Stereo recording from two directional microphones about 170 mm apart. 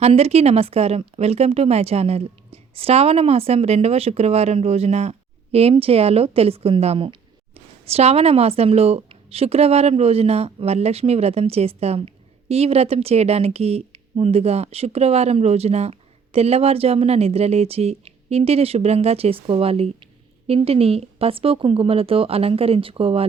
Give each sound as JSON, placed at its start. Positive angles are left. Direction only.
{"t": 0.0, "sound": "speech", "side_deg": -35}